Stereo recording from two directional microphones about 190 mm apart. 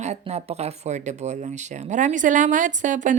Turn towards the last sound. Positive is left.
turn(degrees=-40)  # may be behind; listen again after turning